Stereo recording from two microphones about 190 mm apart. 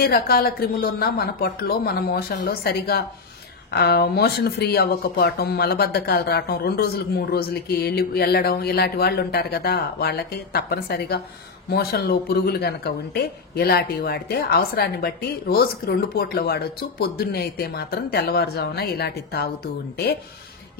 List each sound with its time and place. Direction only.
0.0 s speech: 55° left (ahead or behind)